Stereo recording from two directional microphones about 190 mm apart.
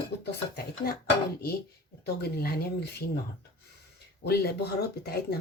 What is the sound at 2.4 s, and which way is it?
Speech, 55° left (ahead or behind).